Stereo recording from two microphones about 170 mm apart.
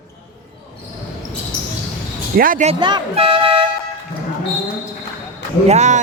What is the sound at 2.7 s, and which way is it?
Speech, 25° right (ahead or behind).